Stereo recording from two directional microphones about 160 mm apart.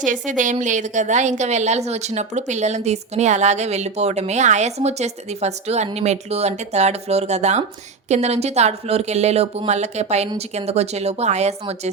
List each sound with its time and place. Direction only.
0.0 s a woman's voice: 50° right (ahead or behind)